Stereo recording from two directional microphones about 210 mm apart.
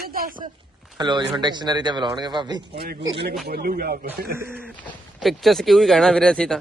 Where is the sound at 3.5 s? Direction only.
45° right (ahead or behind).